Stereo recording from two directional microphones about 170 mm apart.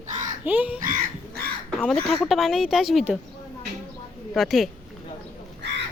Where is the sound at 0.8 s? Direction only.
50° right (ahead or behind).